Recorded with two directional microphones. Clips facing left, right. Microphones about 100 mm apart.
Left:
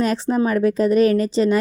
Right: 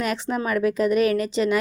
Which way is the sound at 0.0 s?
35° left (ahead or behind).